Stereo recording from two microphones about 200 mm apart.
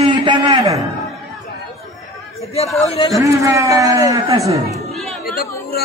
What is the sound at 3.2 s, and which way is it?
A man's voice, 15° right (ahead or behind).